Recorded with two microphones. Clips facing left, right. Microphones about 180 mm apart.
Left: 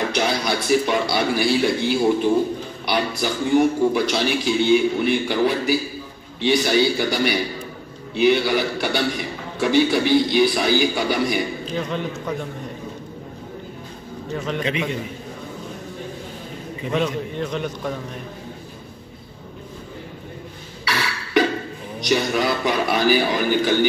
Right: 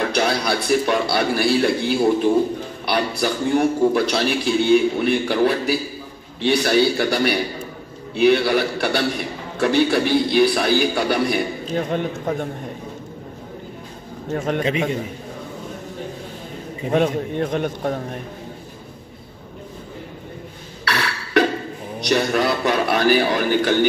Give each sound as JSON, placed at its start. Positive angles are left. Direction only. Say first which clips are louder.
{"t": 0.1, "sound": "a man's voice", "louder": "right 2 dB", "side_deg": 0}
{"t": 11.6, "sound": "a man's voice", "louder": "right 3 dB", "side_deg": -50}
{"t": 14.3, "sound": "a man's voice", "louder": "right 4 dB", "side_deg": -50}
{"t": 14.6, "sound": "a man's voice", "louder": "right 2 dB", "side_deg": -40}
{"t": 16.8, "sound": "a man's voice", "louder": "right 4 dB", "side_deg": -50}
{"t": 20.8, "sound": "a sound", "louder": "right 1 dB", "side_deg": 5}
{"t": 22.1, "sound": "a man's voice", "louder": "right 1 dB", "side_deg": 0}